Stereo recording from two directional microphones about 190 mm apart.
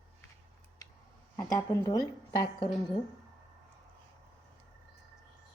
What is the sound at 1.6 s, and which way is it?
A woman's voice, 20° left (ahead or behind).